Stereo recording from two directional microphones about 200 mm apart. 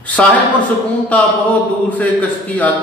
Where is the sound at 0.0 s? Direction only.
5° left (ahead or behind).